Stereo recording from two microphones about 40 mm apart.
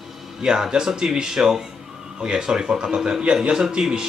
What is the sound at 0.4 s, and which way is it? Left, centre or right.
Speech, centre.